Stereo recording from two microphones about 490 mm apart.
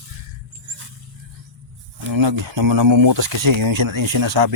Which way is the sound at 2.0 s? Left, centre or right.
Right.